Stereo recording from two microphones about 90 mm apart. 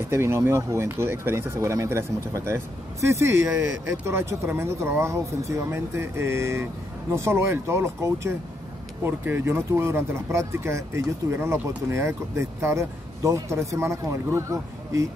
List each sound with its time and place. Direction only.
0.1 s speech: 30° right (ahead or behind)